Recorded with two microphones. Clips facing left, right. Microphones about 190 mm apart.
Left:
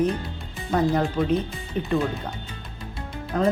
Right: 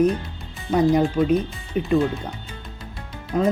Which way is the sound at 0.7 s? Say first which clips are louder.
Right 4 dB; 15° right (ahead or behind).